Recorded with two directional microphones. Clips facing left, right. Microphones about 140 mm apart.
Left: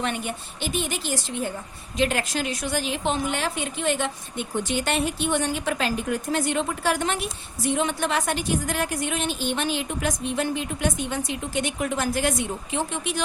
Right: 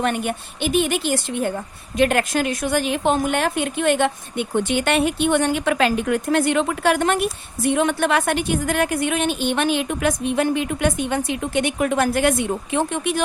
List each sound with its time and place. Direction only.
0.0 s a woman's voice: 55° right (ahead or behind)